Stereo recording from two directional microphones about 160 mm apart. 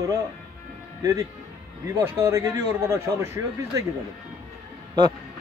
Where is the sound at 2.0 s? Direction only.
15° right (ahead or behind).